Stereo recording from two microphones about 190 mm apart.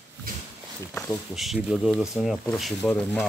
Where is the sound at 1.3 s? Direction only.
Centre (ahead or behind).